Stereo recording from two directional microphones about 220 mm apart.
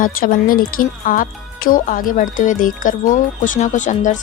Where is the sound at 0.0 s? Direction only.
40° left (ahead or behind).